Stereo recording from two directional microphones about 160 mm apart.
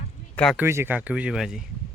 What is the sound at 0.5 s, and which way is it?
Speech, 15° right (ahead or behind).